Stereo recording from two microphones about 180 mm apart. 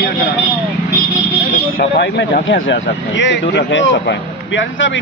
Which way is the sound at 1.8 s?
55° left (ahead or behind).